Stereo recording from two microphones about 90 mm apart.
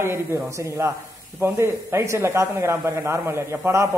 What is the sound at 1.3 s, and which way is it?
Speech, 30° right (ahead or behind).